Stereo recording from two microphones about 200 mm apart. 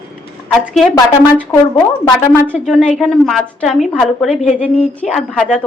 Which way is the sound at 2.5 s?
Centre (ahead or behind).